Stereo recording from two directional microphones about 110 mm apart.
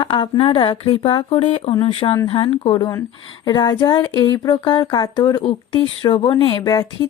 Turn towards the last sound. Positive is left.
turn(degrees=35)  # may be behind; listen again after turning